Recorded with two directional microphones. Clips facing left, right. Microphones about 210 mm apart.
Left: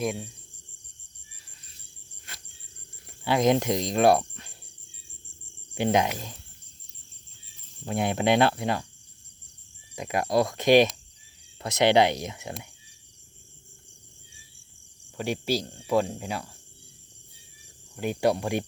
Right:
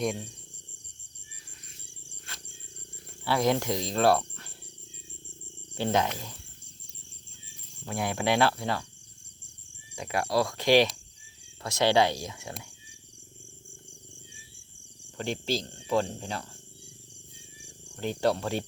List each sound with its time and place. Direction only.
0.0 s speech: 5° left (ahead or behind)
3.2 s speech: 20° left (ahead or behind)
5.7 s speech: 15° left (ahead or behind)
7.9 s speech: 20° left (ahead or behind)
9.9 s speech: 20° left (ahead or behind)
15.2 s speech: 10° left (ahead or behind)
17.9 s speech: 10° left (ahead or behind)